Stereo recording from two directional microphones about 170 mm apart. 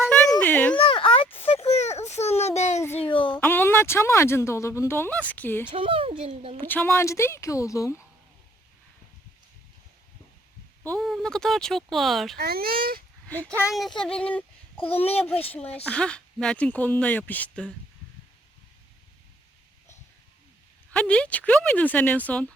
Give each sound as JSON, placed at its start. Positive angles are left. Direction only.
{"t": 0.0, "sound": "a sound", "side_deg": 5}
{"t": 0.8, "sound": "a sound", "side_deg": 30}
{"t": 3.0, "sound": "a sound", "side_deg": 30}
{"t": 3.4, "sound": "speech", "side_deg": 10}
{"t": 5.7, "sound": "speech", "side_deg": -30}
{"t": 6.6, "sound": "speech", "side_deg": 10}
{"t": 10.8, "sound": "speech", "side_deg": 0}
{"t": 12.4, "sound": "speech", "side_deg": -60}
{"t": 13.2, "sound": "speech", "side_deg": 10}
{"t": 14.8, "sound": "speech", "side_deg": 35}
{"t": 15.5, "sound": "speech", "side_deg": 10}
{"t": 20.9, "sound": "speech", "side_deg": 5}